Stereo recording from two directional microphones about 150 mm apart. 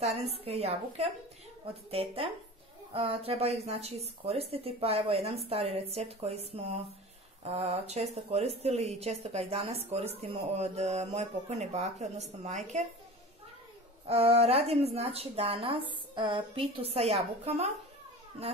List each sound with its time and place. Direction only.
0.0 s a woman's voice: 45° right (ahead or behind)
7.4 s a woman's voice: 45° right (ahead or behind)
14.0 s speech: 40° right (ahead or behind)